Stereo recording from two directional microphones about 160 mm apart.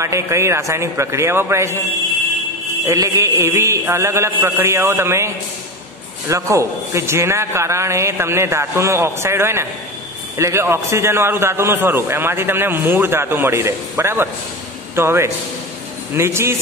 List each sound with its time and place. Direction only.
0.0 s a man's voice: 20° right (ahead or behind)
2.9 s a man's voice: 20° right (ahead or behind)